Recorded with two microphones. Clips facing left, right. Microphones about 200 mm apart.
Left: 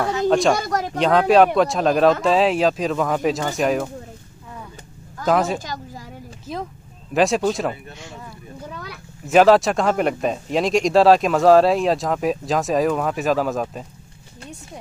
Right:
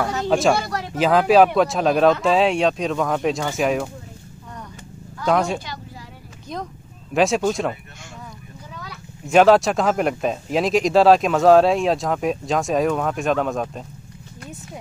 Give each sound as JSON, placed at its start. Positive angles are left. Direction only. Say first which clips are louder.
{"t": 0.3, "sound": "speech", "louder": "even", "side_deg": -5}
{"t": 0.6, "sound": "speech", "louder": "left 3 dB", "side_deg": 45}
{"t": 0.9, "sound": "speech", "louder": "even", "side_deg": -5}
{"t": 5.2, "sound": "speech", "louder": "left 1 dB", "side_deg": 0}
{"t": 5.6, "sound": "a sound", "louder": "left 3 dB", "side_deg": 45}
{"t": 6.4, "sound": "speech", "louder": "left 1 dB", "side_deg": 5}
{"t": 9.2, "sound": "speech", "louder": "even", "side_deg": 0}